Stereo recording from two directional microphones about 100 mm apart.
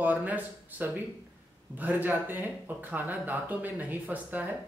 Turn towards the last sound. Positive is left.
turn(degrees=-15)  # may be behind; listen again after turning